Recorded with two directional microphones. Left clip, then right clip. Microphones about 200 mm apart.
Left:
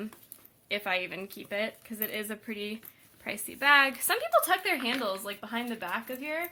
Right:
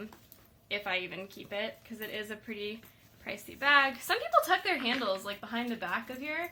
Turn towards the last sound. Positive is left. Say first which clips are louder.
# left 1 dB
turn(degrees=40)  # may be behind; listen again after turning